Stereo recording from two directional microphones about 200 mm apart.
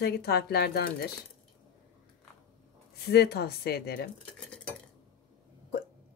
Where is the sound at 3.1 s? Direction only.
50° left (ahead or behind).